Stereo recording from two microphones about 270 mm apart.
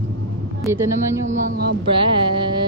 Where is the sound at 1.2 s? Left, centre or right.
Right.